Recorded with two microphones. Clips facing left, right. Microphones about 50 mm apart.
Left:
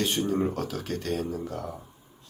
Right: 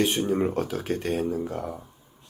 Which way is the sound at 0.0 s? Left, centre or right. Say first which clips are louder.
Right 3 dB; centre.